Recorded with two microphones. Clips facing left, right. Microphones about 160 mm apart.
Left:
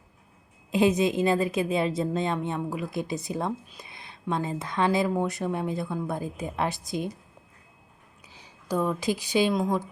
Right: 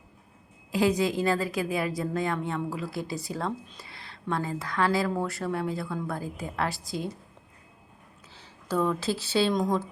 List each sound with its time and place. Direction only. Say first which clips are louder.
0.7 s speech: left 2 dB; 20° left (ahead or behind)
8.3 s speech: left 1 dB; 15° left (ahead or behind)